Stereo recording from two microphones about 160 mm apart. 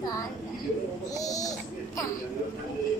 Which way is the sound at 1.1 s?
20° left (ahead or behind).